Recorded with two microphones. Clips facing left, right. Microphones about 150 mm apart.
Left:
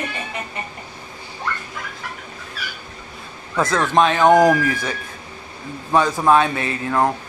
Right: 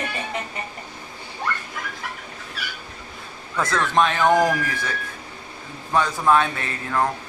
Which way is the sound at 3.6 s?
35° left (ahead or behind).